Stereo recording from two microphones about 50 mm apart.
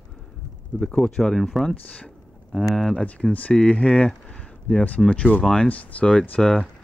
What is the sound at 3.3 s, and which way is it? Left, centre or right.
Speech, left.